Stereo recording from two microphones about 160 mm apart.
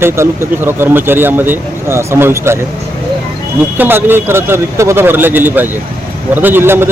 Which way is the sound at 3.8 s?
15° right (ahead or behind).